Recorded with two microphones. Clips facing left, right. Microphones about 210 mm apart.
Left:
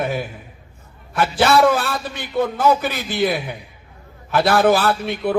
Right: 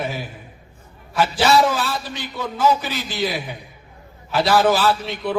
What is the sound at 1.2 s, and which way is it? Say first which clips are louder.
A man's voice: left 1 dB; 55° left (ahead or behind).